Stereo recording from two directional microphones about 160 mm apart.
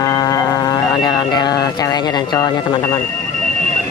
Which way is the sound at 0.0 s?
25° left (ahead or behind).